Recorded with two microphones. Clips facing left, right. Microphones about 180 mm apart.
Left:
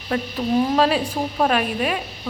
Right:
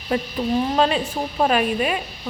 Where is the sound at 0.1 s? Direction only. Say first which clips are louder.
Left 1 dB; 5° right (ahead or behind).